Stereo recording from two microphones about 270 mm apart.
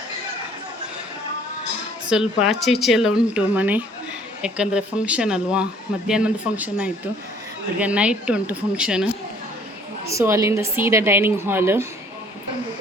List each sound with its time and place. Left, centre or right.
2.1 s a woman's voice: centre